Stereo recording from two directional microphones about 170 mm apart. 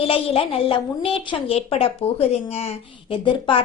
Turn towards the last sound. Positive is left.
turn(degrees=30)  # may be behind; listen again after turning